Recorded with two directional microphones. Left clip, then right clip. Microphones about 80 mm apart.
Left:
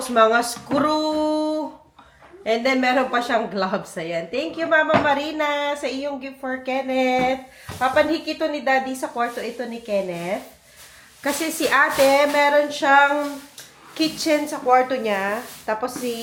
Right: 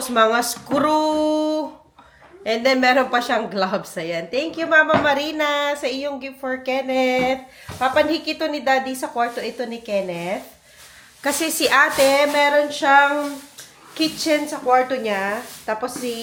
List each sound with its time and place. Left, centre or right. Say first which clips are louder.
0.0 s speech: even; right
2.4 s speech: right 2 dB; right
12.0 s a woman's voice: even; centre